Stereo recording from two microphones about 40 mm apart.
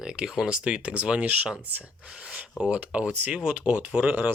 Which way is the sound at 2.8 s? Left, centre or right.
Right.